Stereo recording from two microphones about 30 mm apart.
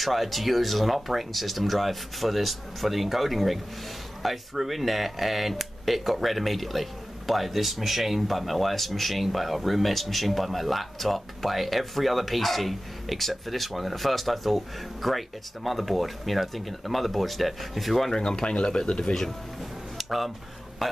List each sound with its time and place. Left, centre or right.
0.0 s speech: centre
18.1 s speech: left
20.0 s speech: centre